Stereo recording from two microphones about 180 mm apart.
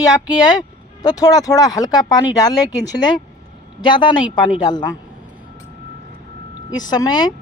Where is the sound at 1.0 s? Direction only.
20° left (ahead or behind).